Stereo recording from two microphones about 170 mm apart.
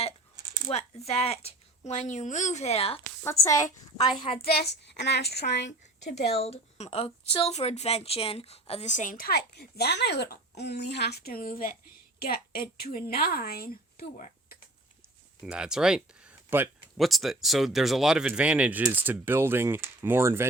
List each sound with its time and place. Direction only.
0.7 s a woman's voice: 40° left (ahead or behind)
3.2 s a woman's voice: 20° left (ahead or behind)
4.4 s a woman's voice: 70° left (ahead or behind); by 6.2 s 90° left
6.2 s a woman's voice: 35° left (ahead or behind); by 14.3 s 60° left (ahead or behind)
15.4 s speech: 5° right (ahead or behind)